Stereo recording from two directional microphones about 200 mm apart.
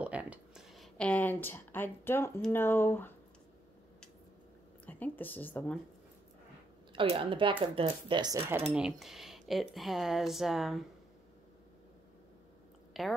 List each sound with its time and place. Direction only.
0.0 s speech: 5° right (ahead or behind); by 3.1 s 10° left (ahead or behind)
4.8 s speech: 10° left (ahead or behind)
6.9 s speech: 25° right (ahead or behind); by 10.8 s centre (ahead or behind)
12.9 s a woman's voice: centre (ahead or behind)